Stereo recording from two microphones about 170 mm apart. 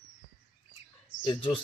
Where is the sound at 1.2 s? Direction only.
30° left (ahead or behind).